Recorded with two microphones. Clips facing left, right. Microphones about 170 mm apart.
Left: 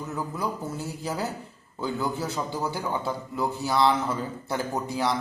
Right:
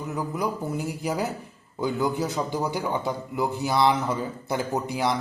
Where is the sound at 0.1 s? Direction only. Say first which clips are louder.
Right 3 dB; 15° right (ahead or behind).